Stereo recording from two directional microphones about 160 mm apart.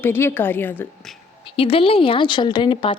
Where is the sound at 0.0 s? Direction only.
15° left (ahead or behind).